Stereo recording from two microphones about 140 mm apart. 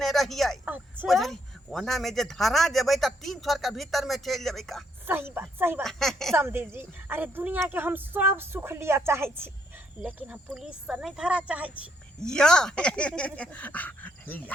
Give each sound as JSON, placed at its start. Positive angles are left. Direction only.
{"t": 0.0, "sound": "a sound", "side_deg": 0}
{"t": 0.6, "sound": "a sound", "side_deg": -15}
{"t": 1.0, "sound": "speech", "side_deg": 0}
{"t": 5.0, "sound": "speech", "side_deg": -15}
{"t": 5.8, "sound": "speech", "side_deg": 0}
{"t": 6.3, "sound": "speech", "side_deg": -15}
{"t": 12.2, "sound": "speech", "side_deg": 5}